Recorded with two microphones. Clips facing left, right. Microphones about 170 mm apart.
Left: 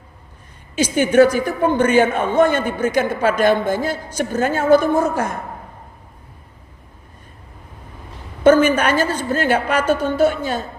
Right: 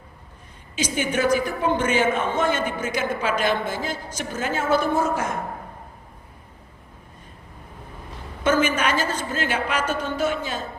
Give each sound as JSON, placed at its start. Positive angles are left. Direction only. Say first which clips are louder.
{"t": 0.8, "sound": "a man's voice", "louder": "left 10 dB", "side_deg": 50}
{"t": 8.4, "sound": "a woman's voice", "louder": "left 8 dB", "side_deg": 55}
{"t": 9.9, "sound": "a woman's voice", "louder": "left 8 dB", "side_deg": 40}